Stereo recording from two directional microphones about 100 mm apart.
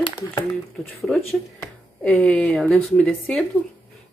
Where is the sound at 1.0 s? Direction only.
5° left (ahead or behind).